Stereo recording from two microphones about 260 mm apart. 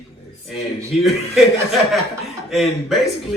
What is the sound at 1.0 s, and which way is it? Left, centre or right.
A man's voice, centre.